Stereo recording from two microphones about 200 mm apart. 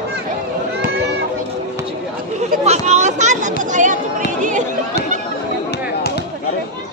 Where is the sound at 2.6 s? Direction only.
35° right (ahead or behind).